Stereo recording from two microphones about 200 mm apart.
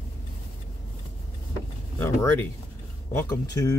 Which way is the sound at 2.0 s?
10° left (ahead or behind).